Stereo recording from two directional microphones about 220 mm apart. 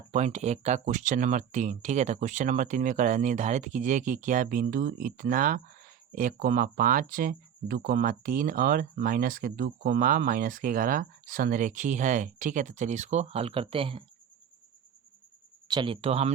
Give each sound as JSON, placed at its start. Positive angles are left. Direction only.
{"t": 0.1, "sound": "speech", "side_deg": -30}
{"t": 15.6, "sound": "speech", "side_deg": -20}